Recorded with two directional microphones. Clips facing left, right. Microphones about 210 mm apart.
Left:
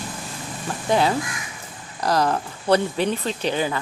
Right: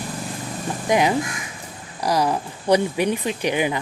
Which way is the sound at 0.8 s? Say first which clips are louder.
Right 1 dB; 15° right (ahead or behind).